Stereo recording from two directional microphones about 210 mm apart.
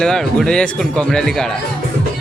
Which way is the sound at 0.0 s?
5° left (ahead or behind).